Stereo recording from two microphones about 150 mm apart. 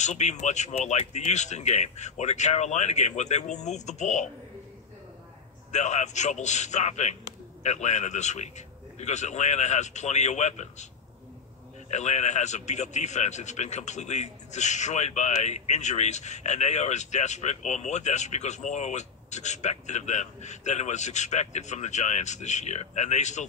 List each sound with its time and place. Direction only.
0.0 s a man's voice: 50° left (ahead or behind)
5.7 s a man's voice: 50° left (ahead or behind)
11.9 s a man's voice: 50° left (ahead or behind)